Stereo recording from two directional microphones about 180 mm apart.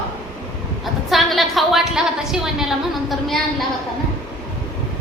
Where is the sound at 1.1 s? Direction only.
Centre (ahead or behind).